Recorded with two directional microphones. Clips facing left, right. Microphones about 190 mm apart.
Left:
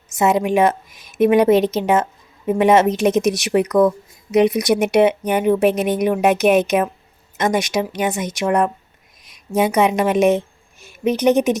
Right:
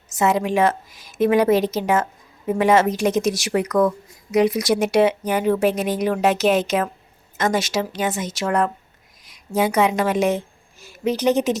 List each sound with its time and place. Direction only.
0.1 s a woman's voice: 15° left (ahead or behind)